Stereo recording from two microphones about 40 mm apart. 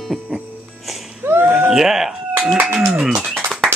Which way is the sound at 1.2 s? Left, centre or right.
Right.